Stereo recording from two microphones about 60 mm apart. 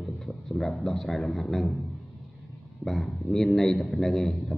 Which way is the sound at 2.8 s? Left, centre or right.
Centre.